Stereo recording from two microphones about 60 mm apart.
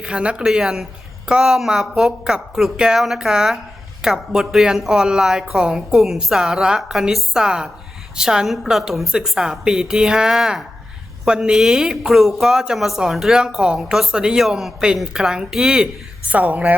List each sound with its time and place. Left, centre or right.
0.0 s speech: centre
0.4 s speech: centre
16.3 s a woman's voice: right